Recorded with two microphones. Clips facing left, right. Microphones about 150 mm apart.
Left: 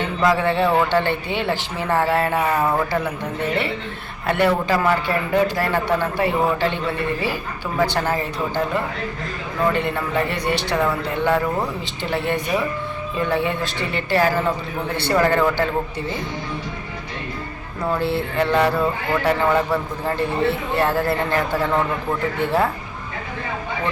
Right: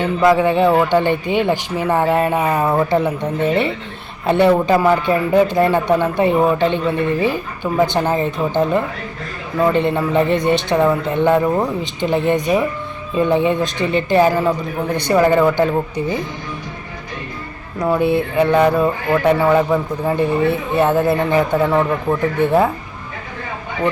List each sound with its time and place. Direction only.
0.2 s mantra: 15° right (ahead or behind)
4.3 s a man's voice: 20° right (ahead or behind)
12.0 s mantra: 20° right (ahead or behind)
13.1 s a man's voice: 20° right (ahead or behind)
14.9 s mantra: 15° right (ahead or behind)
17.7 s mantra: 15° right (ahead or behind)